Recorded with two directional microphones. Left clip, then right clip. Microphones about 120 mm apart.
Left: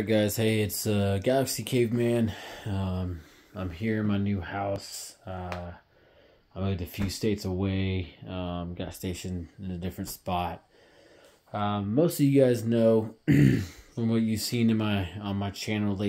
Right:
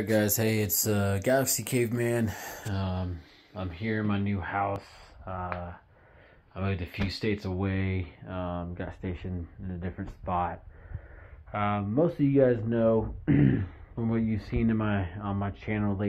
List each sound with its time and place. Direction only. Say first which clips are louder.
0.1 s speech: left 1 dB; 35° left (ahead or behind)
0.5 s speech: left 1 dB; 15° left (ahead or behind)
2.6 s speech: left 1 dB; 30° left (ahead or behind); by 5.6 s 60° left (ahead or behind)
6.5 s speech: even; 50° left (ahead or behind)
11.5 s speech: right 1 dB; 5° left (ahead or behind)
11.9 s speech: left 3 dB; 60° left (ahead or behind)